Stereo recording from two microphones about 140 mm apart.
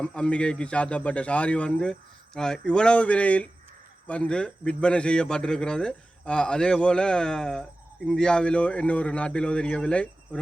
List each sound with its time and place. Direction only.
0.0 s a man's voice: 10° left (ahead or behind)